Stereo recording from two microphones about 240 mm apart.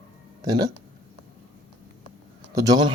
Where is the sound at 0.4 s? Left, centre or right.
Centre.